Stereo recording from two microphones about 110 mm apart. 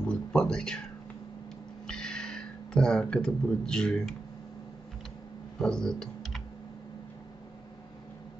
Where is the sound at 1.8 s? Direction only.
5° left (ahead or behind).